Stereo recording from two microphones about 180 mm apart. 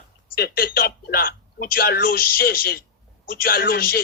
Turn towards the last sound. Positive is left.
turn(degrees=55)  # may be behind; listen again after turning